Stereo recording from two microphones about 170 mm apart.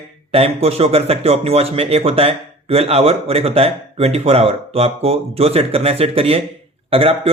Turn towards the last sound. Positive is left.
turn(degrees=-35)  # may be behind; listen again after turning